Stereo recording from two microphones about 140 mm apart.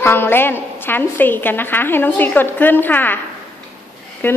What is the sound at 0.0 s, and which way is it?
A woman's voice, 15° left (ahead or behind).